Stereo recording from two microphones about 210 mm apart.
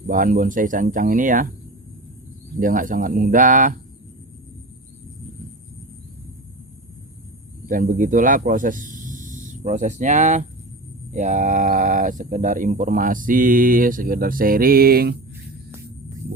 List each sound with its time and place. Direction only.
0.1 s speech: 40° right (ahead or behind)
2.6 s speech: 40° right (ahead or behind)
7.7 s speech: 40° right (ahead or behind)